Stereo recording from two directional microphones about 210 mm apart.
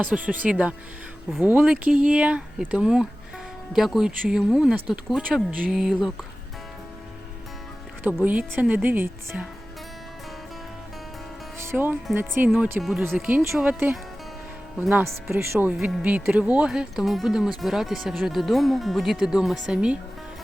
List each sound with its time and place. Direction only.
0.0 s speech: 5° right (ahead or behind)
8.0 s speech: 5° right (ahead or behind)
11.6 s speech: 10° right (ahead or behind)